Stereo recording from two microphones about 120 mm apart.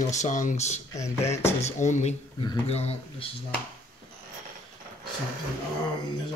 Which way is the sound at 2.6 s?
60° left (ahead or behind).